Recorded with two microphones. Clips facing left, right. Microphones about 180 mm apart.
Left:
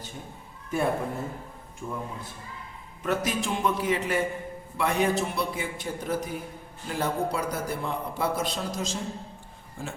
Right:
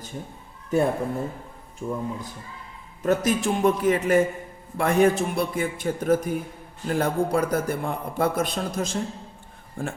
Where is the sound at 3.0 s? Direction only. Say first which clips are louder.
Right 6 dB; 45° right (ahead or behind).